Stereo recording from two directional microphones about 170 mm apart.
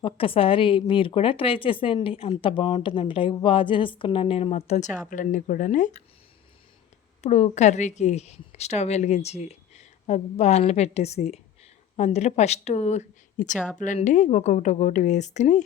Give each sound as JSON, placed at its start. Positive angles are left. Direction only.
{"t": 0.0, "sound": "a woman's voice", "side_deg": 30}
{"t": 7.2, "sound": "a woman's voice", "side_deg": 40}